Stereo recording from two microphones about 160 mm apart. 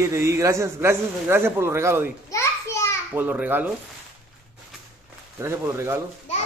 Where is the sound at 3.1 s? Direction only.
10° right (ahead or behind).